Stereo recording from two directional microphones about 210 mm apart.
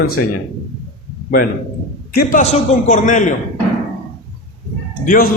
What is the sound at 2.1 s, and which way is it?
A man's voice, 40° left (ahead or behind).